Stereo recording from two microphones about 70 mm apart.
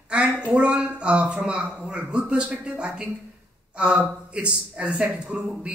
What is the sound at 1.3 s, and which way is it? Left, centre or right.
A man's voice, centre.